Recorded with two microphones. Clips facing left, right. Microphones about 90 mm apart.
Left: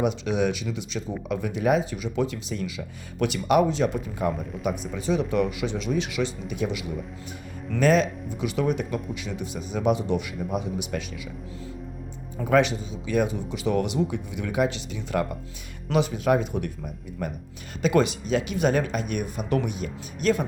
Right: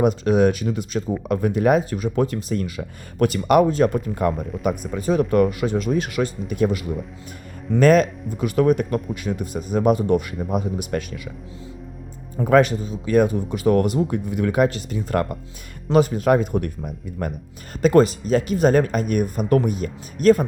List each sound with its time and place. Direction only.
0.0 s speech: 45° right (ahead or behind)
12.5 s speech: 45° right (ahead or behind)
17.8 s speech: 40° right (ahead or behind)